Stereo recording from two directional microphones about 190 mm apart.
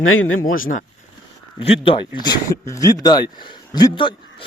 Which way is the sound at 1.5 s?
30° left (ahead or behind).